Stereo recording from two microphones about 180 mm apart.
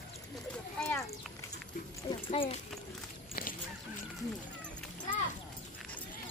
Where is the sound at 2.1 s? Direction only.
30° left (ahead or behind).